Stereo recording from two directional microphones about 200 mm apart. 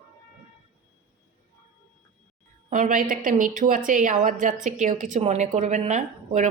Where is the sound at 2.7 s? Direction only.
40° right (ahead or behind).